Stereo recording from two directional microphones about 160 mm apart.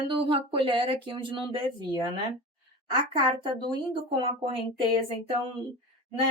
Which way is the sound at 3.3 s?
25° right (ahead or behind).